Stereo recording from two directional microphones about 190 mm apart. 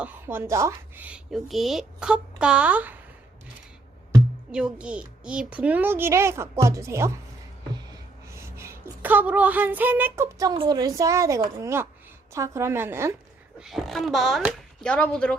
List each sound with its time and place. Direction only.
0.0 s a woman's voice: 10° right (ahead or behind)
4.5 s a woman's voice: 5° right (ahead or behind)
8.3 s a woman's voice: 15° right (ahead or behind)
13.6 s speech: centre (ahead or behind)